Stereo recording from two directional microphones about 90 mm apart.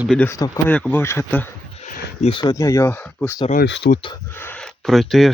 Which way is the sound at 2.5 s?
35° left (ahead or behind).